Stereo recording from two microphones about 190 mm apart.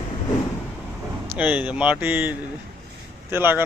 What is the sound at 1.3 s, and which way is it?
Speech, 10° right (ahead or behind).